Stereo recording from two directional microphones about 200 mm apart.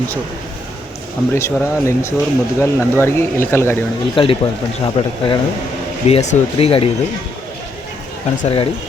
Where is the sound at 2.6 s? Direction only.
10° left (ahead or behind).